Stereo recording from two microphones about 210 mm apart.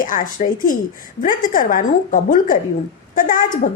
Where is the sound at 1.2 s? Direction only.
40° left (ahead or behind).